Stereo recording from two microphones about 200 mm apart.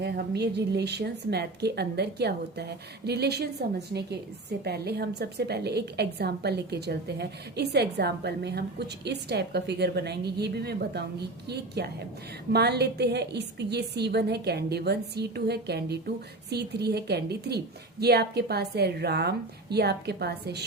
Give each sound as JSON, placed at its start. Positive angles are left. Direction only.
{"t": 0.0, "sound": "a woman's voice", "side_deg": -55}